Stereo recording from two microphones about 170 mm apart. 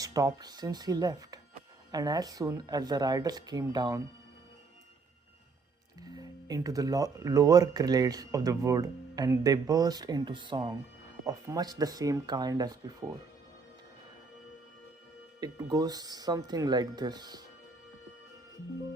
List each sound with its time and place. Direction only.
0.0 s speech: 20° right (ahead or behind)
6.0 s speech: 20° right (ahead or behind)
15.4 s speech: 20° right (ahead or behind)